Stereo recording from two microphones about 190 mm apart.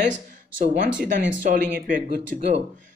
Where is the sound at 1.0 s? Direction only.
45° right (ahead or behind).